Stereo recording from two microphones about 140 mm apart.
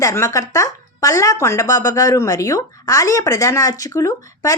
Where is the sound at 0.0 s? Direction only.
20° left (ahead or behind).